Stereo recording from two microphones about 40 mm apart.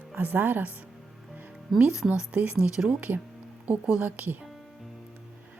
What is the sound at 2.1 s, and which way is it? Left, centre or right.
Speech, right.